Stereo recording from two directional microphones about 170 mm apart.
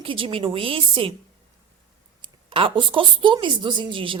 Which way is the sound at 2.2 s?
30° right (ahead or behind).